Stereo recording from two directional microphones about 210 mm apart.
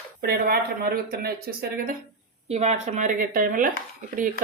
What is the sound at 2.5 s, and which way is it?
Speech, 30° right (ahead or behind).